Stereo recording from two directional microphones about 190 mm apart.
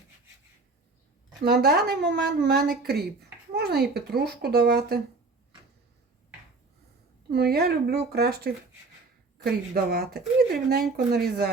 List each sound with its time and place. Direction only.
1.5 s a child's voice: 55° right (ahead or behind)
7.3 s a child's voice: 55° right (ahead or behind)
9.7 s speech: 55° right (ahead or behind)